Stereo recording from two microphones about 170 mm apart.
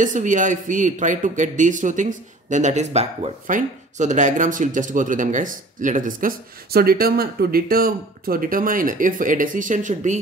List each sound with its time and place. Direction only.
0.0 s a man's voice: 50° right (ahead or behind)